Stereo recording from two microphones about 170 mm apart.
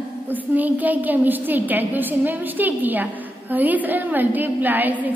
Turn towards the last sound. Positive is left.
turn(degrees=-10)  # may be behind; listen again after turning